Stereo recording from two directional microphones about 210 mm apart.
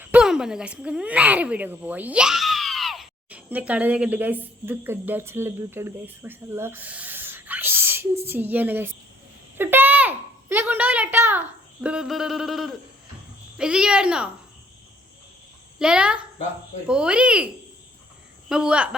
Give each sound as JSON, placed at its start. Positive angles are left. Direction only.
{"t": 0.0, "sound": "speech", "side_deg": -5}
{"t": 9.6, "sound": "a sound", "side_deg": -10}
{"t": 13.6, "sound": "speech", "side_deg": -5}
{"t": 15.8, "sound": "speech", "side_deg": -5}